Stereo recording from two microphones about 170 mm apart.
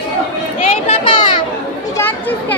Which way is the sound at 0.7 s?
35° left (ahead or behind).